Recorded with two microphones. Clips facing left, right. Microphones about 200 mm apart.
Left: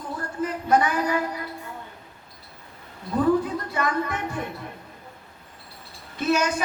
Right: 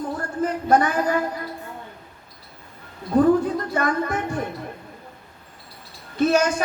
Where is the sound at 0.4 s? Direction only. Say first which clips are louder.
Right 2 dB; 45° right (ahead or behind).